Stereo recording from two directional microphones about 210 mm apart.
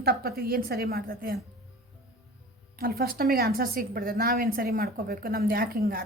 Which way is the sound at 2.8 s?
45° right (ahead or behind).